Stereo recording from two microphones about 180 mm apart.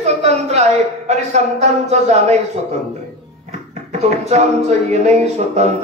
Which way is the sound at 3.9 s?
35° right (ahead or behind).